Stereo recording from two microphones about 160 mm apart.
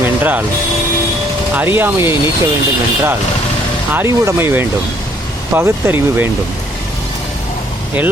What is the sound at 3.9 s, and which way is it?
Speech, 15° right (ahead or behind).